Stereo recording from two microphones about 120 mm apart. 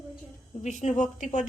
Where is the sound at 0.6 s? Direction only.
80° left.